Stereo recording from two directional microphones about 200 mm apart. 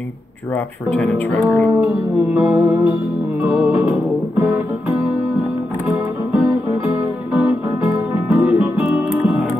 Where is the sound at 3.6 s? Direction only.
15° right (ahead or behind).